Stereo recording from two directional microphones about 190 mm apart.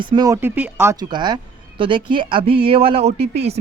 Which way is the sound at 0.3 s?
10° right (ahead or behind).